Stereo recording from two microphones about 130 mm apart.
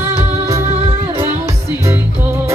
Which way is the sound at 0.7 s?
50° right (ahead or behind).